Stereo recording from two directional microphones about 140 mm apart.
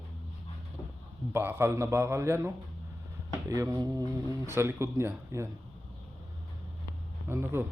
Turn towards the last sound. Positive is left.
turn(degrees=-15)  # may be behind; listen again after turning